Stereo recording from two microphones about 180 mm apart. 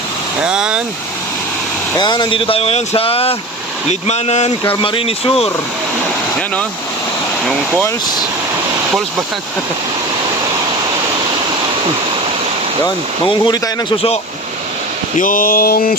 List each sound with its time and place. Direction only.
0.4 s speech: 5° right (ahead or behind)
2.0 s speech: 25° left (ahead or behind)
12.8 s speech: 25° left (ahead or behind)
15.2 s speech: 50° left (ahead or behind)